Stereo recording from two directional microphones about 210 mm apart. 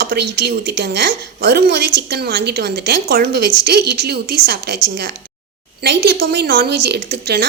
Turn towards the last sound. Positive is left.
turn(degrees=-50)  # may be behind; listen again after turning